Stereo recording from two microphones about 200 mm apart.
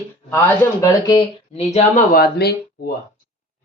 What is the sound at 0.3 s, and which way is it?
Speech, 15° left (ahead or behind).